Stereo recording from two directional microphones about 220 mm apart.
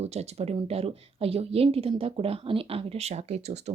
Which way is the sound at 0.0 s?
30° right (ahead or behind).